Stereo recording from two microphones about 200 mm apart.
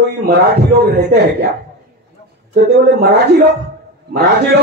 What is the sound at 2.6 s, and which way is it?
Speech, 55° right (ahead or behind).